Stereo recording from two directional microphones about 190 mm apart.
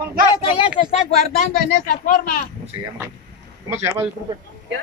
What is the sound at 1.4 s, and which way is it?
Speech, 45° left (ahead or behind).